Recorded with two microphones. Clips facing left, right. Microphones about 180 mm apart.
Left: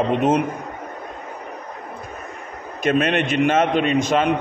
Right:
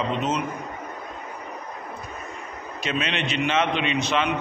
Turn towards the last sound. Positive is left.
turn(degrees=45)  # may be behind; listen again after turning